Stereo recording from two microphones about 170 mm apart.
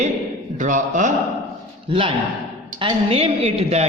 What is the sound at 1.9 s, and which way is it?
A man's voice, 30° right (ahead or behind).